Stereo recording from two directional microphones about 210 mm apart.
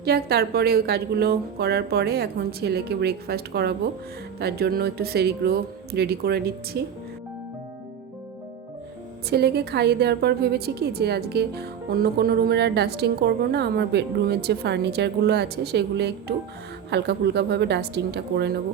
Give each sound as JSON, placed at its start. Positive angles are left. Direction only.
{"t": 0.0, "sound": "a woman's voice", "side_deg": -50}
{"t": 9.3, "sound": "a woman's voice", "side_deg": -50}